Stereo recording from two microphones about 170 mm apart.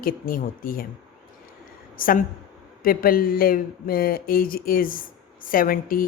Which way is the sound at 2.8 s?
60° left (ahead or behind).